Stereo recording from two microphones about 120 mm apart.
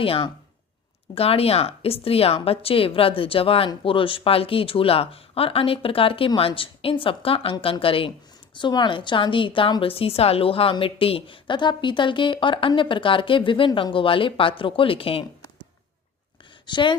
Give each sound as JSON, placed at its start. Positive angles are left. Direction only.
{"t": 0.0, "sound": "a woman's voice", "side_deg": 50}
{"t": 16.6, "sound": "speech", "side_deg": 40}